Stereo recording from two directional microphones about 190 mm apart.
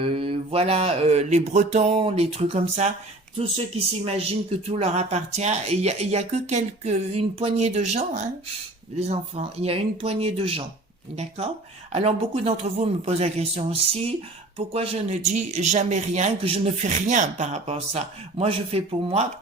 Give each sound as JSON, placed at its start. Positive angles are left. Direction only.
{"t": 0.0, "sound": "speech", "side_deg": -25}